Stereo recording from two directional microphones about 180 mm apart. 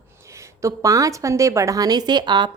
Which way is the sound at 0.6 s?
20° right (ahead or behind).